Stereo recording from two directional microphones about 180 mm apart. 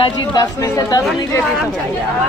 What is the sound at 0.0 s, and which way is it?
Speech, 20° left (ahead or behind).